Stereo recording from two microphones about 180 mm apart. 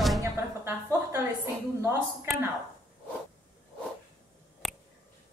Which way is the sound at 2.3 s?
Centre (ahead or behind).